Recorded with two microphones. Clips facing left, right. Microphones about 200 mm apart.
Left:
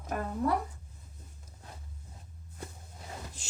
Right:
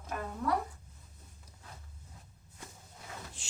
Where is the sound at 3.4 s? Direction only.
40° left (ahead or behind).